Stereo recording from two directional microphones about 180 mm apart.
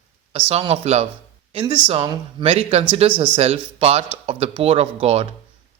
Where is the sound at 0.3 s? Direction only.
30° right (ahead or behind).